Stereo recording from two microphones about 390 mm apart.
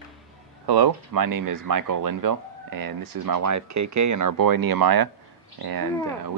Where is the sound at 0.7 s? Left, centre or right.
Right.